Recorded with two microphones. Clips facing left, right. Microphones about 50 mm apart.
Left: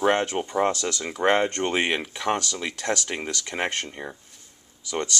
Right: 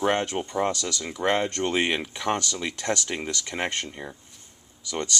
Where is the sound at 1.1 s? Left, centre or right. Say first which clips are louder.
Left 3 dB; left.